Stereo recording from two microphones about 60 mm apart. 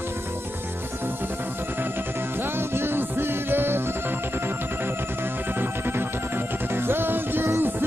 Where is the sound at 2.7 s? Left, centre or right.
Right.